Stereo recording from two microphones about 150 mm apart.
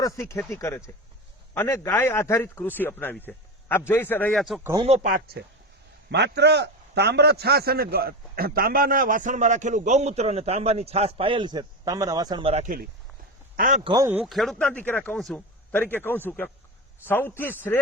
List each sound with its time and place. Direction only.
0.0 s a man's voice: 20° left (ahead or behind)
4.4 s speech: centre (ahead or behind)
5.0 s speech: 75° right (ahead or behind)
6.5 s a man's voice: 90° right; by 12.6 s 35° right (ahead or behind)
13.6 s a man's voice: 55° right (ahead or behind)
14.0 s speech: 15° right (ahead or behind)
14.3 s speech: centre (ahead or behind)
14.7 s a man's voice: 10° left (ahead or behind)